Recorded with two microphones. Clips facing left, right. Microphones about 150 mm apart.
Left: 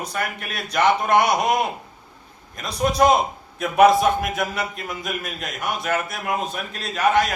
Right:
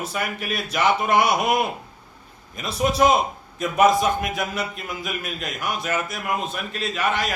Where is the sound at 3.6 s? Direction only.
65° left (ahead or behind).